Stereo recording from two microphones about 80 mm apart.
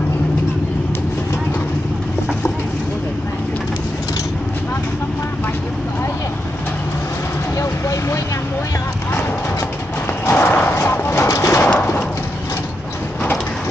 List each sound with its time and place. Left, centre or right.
7.5 s vehicle: left
10.2 s clip-clop: left
11.2 s bird: left